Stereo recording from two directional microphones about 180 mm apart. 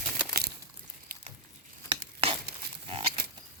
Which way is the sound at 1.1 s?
55° right (ahead or behind).